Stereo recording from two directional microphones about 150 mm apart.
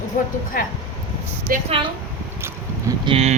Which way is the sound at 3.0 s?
40° right (ahead or behind).